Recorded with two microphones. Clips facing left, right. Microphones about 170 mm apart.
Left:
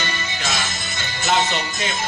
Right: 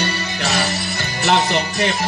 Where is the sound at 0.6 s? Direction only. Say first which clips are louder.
Right 7 dB; 35° right (ahead or behind).